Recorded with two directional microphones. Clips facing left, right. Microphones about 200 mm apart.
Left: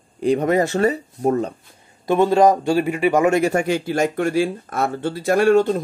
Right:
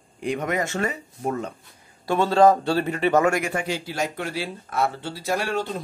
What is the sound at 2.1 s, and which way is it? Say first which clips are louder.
Speech: left 3 dB; 15° left (ahead or behind).